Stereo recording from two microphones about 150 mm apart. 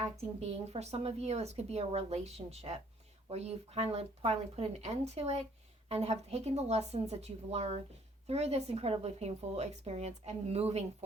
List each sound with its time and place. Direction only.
0.0 s a woman's voice: 45° right (ahead or behind)